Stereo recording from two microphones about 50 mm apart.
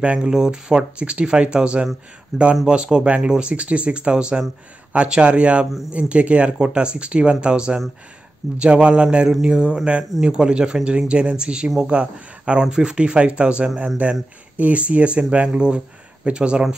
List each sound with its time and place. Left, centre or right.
0.0 s speech: right